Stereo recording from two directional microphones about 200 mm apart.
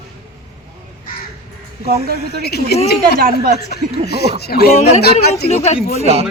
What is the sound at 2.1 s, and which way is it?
Speech, 55° left (ahead or behind).